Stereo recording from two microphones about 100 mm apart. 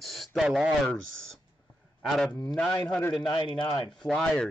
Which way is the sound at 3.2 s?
50° left (ahead or behind).